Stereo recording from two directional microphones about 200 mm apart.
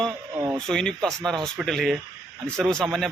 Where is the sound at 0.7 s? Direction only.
5° left (ahead or behind).